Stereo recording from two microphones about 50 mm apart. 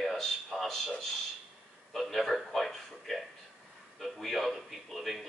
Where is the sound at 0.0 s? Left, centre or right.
Centre.